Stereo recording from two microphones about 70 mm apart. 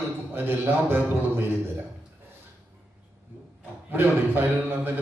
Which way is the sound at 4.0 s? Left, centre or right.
Right.